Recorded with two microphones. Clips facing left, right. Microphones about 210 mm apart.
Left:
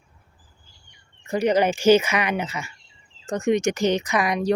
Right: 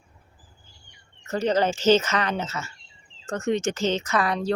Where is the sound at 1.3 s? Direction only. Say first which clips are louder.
Left 3 dB; 15° left (ahead or behind).